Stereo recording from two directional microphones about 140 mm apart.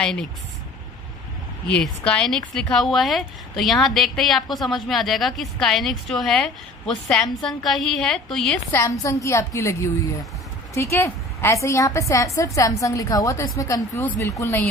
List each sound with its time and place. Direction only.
0.0 s speech: 5° left (ahead or behind)
1.7 s speech: 10° left (ahead or behind)
9.0 s speech: 20° left (ahead or behind)